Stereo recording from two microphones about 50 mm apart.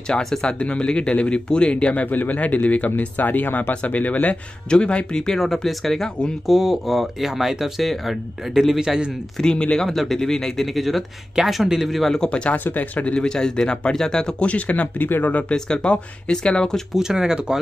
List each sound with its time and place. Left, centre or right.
0.2 s speech: centre
2.0 s speech: left
4.6 s speech: left
5.4 s speech: centre
9.4 s speech: centre
9.8 s speech: centre
12.0 s speech: centre
12.3 s speech: left
12.5 s speech: left
13.0 s speech: centre
14.4 s speech: left
15.0 s speech: left
15.5 s speech: centre
16.9 s speech: centre